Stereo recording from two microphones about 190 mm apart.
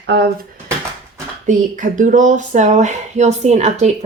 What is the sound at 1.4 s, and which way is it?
Speech, 40° right (ahead or behind).